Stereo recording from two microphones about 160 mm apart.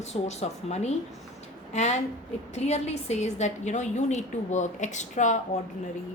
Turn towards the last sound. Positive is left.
turn(degrees=50)  # may be behind; listen again after turning